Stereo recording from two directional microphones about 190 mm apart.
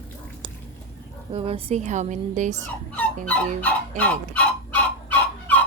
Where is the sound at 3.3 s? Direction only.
10° left (ahead or behind).